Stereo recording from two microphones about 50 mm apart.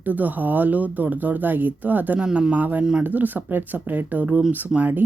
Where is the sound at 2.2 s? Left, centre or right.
Right.